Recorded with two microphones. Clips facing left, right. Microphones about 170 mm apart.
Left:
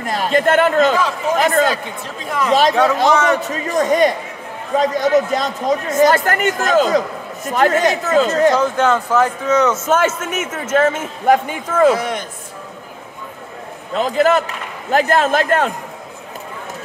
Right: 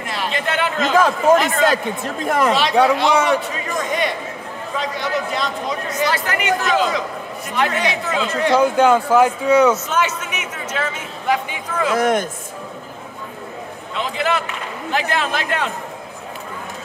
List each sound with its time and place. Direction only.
0.0 s a man's voice: 45° left (ahead or behind)
0.9 s a man's voice: 50° right (ahead or behind)
1.4 s a man's voice: 45° left (ahead or behind)
2.2 s a man's voice: 50° right (ahead or behind)
2.7 s speech: 15° right (ahead or behind)
3.4 s a man's voice: 45° left (ahead or behind)
8.5 s speech: 10° right (ahead or behind)
9.8 s a man's voice: 50° left (ahead or behind)
11.9 s a man's voice: 45° right (ahead or behind)
13.9 s a man's voice: 45° left (ahead or behind)